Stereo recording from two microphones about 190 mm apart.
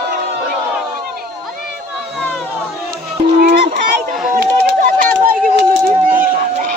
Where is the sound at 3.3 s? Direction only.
55° right (ahead or behind).